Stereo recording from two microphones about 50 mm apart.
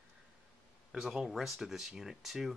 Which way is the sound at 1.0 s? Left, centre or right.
Centre.